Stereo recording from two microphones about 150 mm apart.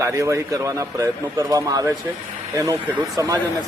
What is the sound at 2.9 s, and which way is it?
Speech, 20° right (ahead or behind).